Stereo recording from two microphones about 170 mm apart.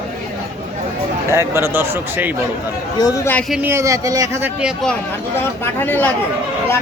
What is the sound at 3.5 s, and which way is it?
Speech, 5° right (ahead or behind).